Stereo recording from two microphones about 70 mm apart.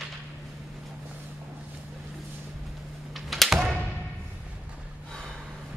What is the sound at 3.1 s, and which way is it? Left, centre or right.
Typing, centre.